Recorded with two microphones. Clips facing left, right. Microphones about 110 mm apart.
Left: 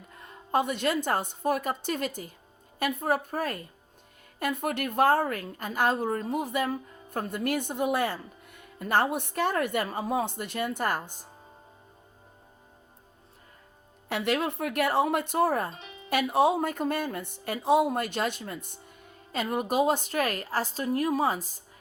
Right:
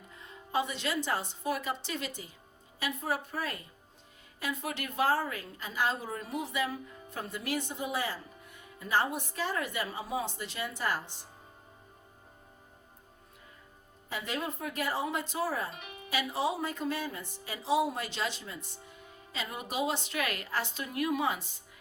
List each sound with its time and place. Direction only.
0.2 s a woman's voice: 55° left (ahead or behind)
14.1 s speech: 75° left (ahead or behind); by 15.7 s 55° left (ahead or behind)
15.7 s music: 30° left (ahead or behind)
16.0 s a woman's voice: 55° left (ahead or behind); by 21.5 s 40° left (ahead or behind)